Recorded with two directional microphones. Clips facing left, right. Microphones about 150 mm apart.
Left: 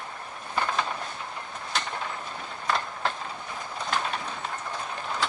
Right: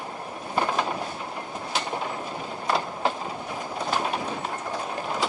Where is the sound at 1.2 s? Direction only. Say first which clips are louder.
Right 4 dB; 30° right (ahead or behind).